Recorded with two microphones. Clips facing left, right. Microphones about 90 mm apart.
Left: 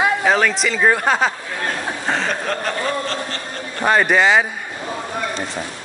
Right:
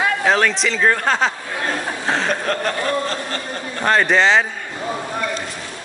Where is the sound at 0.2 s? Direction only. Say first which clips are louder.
Even; centre (ahead or behind).